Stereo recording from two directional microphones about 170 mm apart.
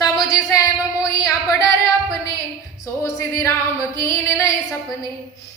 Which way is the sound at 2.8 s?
20° left (ahead or behind).